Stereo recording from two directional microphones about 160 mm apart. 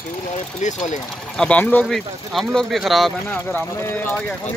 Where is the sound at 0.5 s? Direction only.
50° left (ahead or behind).